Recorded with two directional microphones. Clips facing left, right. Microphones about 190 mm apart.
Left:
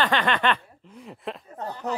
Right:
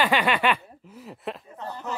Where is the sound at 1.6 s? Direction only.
35° left (ahead or behind).